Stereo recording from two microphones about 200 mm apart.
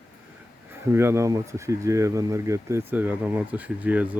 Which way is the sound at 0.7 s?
10° right (ahead or behind).